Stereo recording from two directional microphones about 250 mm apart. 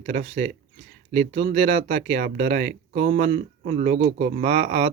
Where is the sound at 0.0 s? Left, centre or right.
Right.